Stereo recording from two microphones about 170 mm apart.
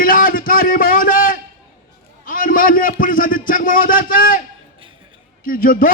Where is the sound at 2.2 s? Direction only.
55° left (ahead or behind).